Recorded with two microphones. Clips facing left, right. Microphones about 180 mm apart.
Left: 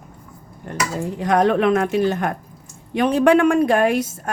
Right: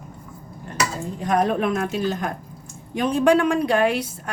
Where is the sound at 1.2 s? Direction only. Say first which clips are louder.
Left 4 dB; 80° left; by 2.3 s 60° left (ahead or behind).